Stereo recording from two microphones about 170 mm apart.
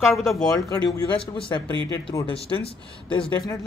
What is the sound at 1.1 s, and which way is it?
Speech, 30° left (ahead or behind).